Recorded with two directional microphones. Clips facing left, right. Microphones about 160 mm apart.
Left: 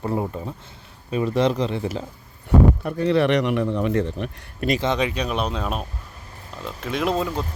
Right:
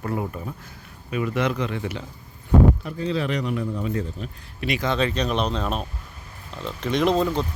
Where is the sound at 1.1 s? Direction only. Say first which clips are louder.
Left 4 dB; 30° left (ahead or behind).